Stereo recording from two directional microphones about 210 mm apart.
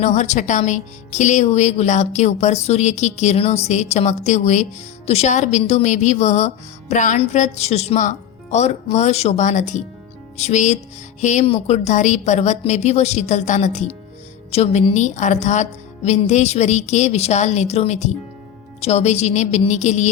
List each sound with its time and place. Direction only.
0.0 s speech: 35° left (ahead or behind)